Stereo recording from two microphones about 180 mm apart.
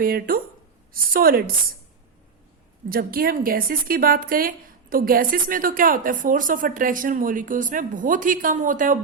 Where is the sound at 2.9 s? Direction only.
55° right (ahead or behind).